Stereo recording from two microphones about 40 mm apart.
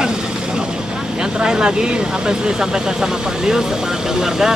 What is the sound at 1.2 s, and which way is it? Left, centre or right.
Speech, centre.